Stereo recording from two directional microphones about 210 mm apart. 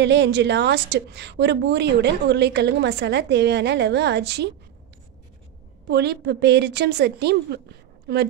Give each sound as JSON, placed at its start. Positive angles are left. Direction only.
{"t": 0.0, "sound": "a woman's voice", "side_deg": -55}
{"t": 5.9, "sound": "a woman's voice", "side_deg": -50}